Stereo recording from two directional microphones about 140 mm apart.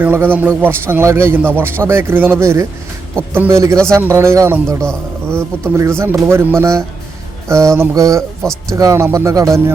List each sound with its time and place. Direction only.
0.0 s a man's voice: 15° right (ahead or behind)